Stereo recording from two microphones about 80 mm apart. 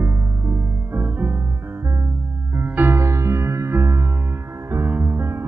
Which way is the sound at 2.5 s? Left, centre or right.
Right.